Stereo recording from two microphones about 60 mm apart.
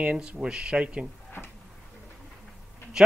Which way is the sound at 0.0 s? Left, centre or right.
Right.